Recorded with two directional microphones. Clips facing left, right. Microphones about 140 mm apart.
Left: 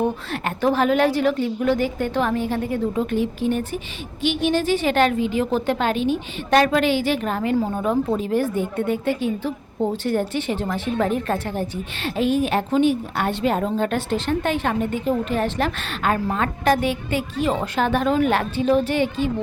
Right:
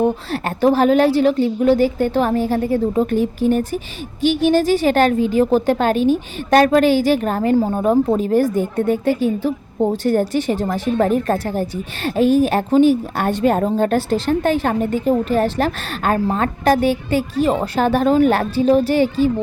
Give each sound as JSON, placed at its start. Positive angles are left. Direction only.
{"t": 0.3, "sound": "a woman's voice", "side_deg": -35}